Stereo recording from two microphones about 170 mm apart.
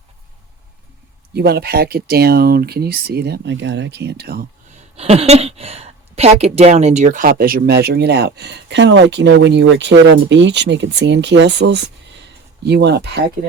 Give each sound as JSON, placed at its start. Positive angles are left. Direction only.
{"t": 1.3, "sound": "a woman's voice", "side_deg": -70}
{"t": 4.7, "sound": "a woman's voice", "side_deg": -40}